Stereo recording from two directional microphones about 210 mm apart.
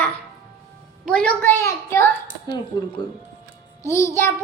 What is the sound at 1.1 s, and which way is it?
A child's voice, 5° left (ahead or behind).